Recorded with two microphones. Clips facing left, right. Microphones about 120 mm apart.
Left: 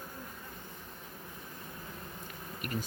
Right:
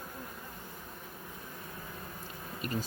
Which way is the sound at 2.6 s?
25° right (ahead or behind).